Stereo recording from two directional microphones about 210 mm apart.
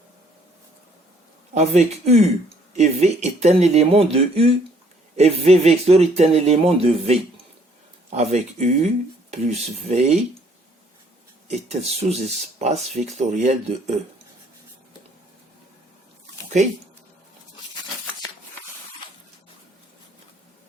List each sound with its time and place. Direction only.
1.5 s speech: 30° right (ahead or behind)
11.4 s speech: 30° right (ahead or behind)
16.6 s speech: 35° right (ahead or behind)